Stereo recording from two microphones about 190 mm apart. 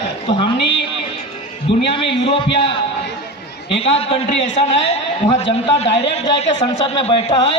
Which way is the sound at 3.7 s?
30° left (ahead or behind).